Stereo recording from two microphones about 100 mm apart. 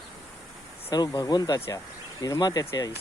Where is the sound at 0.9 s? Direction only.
45° left (ahead or behind).